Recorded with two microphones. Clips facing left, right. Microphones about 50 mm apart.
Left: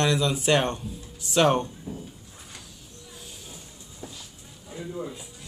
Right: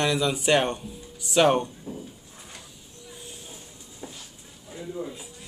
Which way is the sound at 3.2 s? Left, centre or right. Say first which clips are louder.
Right 1 dB; centre.